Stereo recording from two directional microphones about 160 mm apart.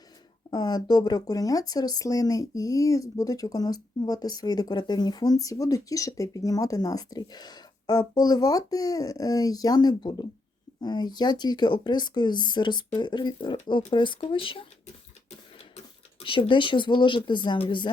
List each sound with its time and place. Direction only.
0.5 s speech: 25° left (ahead or behind)
16.2 s speech: 30° left (ahead or behind)